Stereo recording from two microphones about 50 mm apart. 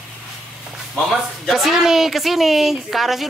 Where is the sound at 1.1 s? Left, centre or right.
Centre.